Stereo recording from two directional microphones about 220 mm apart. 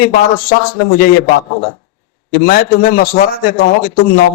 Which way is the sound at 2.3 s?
40° left (ahead or behind).